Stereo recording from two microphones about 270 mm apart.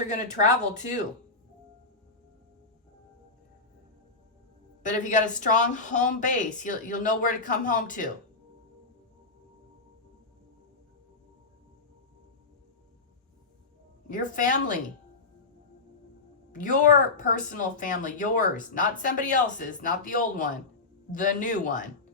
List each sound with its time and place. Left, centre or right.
0.1 s a woman's voice: left
4.8 s a woman's voice: left
14.1 s a woman's voice: left
16.5 s a woman's voice: left